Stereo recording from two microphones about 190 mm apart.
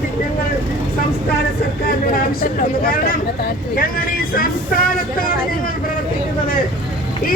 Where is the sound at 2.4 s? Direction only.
50° left (ahead or behind).